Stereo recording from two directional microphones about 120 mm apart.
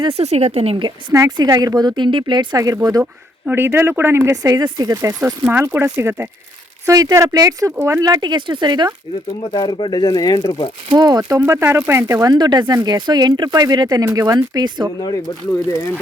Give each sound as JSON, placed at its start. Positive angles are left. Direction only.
{"t": 0.1, "sound": "speech", "side_deg": -65}
{"t": 1.4, "sound": "speech", "side_deg": -35}
{"t": 3.0, "sound": "speech", "side_deg": -15}
{"t": 5.2, "sound": "speech", "side_deg": -20}
{"t": 9.4, "sound": "speech", "side_deg": 40}
{"t": 10.8, "sound": "speech", "side_deg": -35}
{"t": 11.2, "sound": "speech", "side_deg": -20}